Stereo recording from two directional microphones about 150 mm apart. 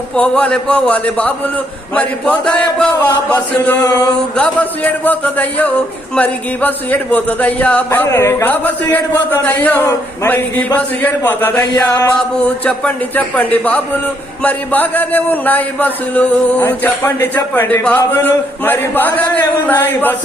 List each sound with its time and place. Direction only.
0.2 s a man's voice: 10° left (ahead or behind)
12.6 s a man's voice: 10° left (ahead or behind)